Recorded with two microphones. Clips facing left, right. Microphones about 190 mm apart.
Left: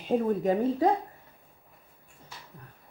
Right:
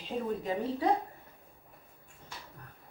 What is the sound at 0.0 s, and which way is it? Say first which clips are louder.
Speech: left 8 dB; 50° left (ahead or behind).